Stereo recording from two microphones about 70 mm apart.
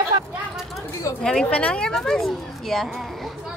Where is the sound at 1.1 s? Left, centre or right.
Left.